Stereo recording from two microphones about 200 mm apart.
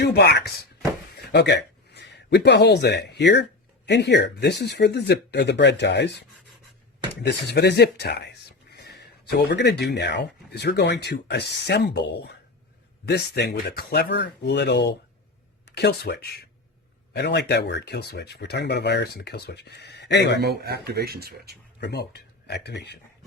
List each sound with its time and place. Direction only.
0.0 s speech: 55° left (ahead or behind)
20.4 s speech: 55° right (ahead or behind)
21.8 s speech: 55° left (ahead or behind)